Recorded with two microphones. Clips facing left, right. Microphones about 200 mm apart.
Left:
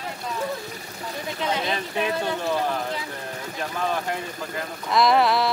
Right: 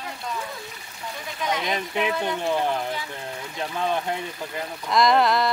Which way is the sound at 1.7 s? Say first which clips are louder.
Even; 20° right (ahead or behind).